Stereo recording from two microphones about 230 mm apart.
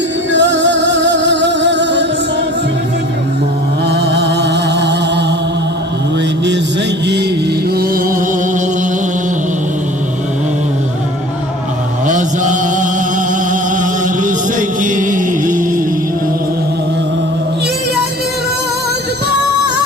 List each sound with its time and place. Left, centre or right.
0.3 s music: right
3.8 s music: right
7.8 s music: right
12.0 s chant: right
14.8 s music: right